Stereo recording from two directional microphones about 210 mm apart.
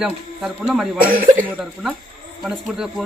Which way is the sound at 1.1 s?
40° right (ahead or behind).